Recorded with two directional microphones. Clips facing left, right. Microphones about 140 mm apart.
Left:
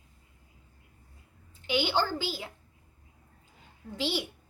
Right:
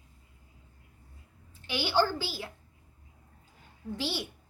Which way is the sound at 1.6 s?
15° left (ahead or behind).